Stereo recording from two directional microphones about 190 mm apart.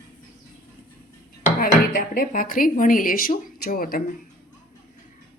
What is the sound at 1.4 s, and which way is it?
Speech, 50° left (ahead or behind).